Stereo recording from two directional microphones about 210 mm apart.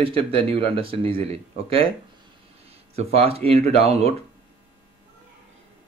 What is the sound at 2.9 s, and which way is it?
Speech, 30° right (ahead or behind).